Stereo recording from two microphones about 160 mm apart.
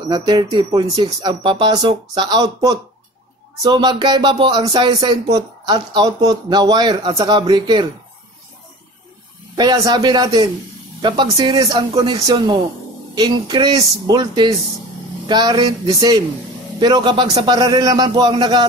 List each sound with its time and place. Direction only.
0.1 s speech: 25° right (ahead or behind)
9.6 s speech: 25° right (ahead or behind)